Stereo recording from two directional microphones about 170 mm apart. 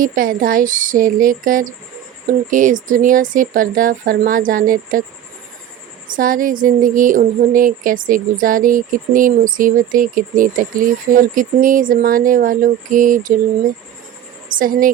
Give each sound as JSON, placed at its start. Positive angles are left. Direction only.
{"t": 0.0, "sound": "speech", "side_deg": -55}
{"t": 6.1, "sound": "speech", "side_deg": -55}
{"t": 14.6, "sound": "a woman's voice", "side_deg": -55}